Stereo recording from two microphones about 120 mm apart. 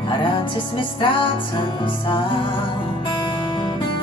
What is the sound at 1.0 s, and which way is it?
Music, 45° left (ahead or behind).